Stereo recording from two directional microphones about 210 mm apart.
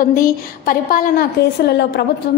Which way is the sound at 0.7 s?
40° left (ahead or behind).